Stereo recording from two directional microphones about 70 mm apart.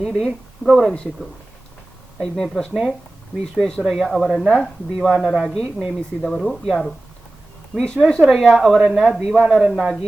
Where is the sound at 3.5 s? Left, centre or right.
Centre.